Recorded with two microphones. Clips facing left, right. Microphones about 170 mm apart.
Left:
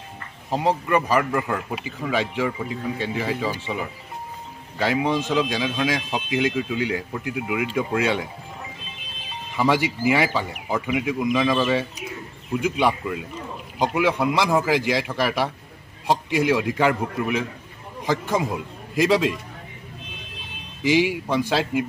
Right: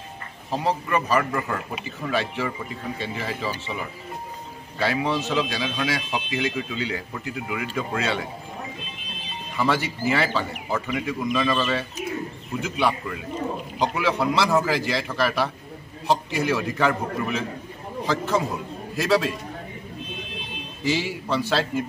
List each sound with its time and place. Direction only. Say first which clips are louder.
0.5 s speech: left 3 dB; 15° left (ahead or behind)
4.7 s speech: left 2 dB; 15° left (ahead or behind)
9.6 s speech: left 3 dB; 15° left (ahead or behind)
20.8 s speech: left 6 dB; 15° left (ahead or behind)